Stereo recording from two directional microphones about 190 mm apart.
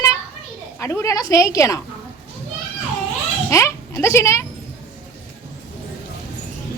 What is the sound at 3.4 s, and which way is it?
Speech, 15° left (ahead or behind).